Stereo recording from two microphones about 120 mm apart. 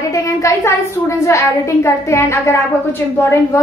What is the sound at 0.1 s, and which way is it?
A woman's voice, 25° left (ahead or behind).